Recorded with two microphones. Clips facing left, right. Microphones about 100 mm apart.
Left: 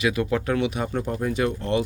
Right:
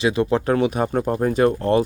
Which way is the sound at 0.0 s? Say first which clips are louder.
Right 4 dB; 30° right (ahead or behind).